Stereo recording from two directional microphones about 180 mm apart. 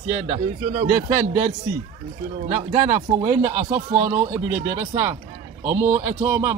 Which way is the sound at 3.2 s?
25° right (ahead or behind).